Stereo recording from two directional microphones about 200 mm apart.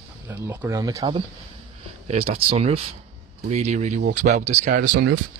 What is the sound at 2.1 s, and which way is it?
Speech, 30° right (ahead or behind).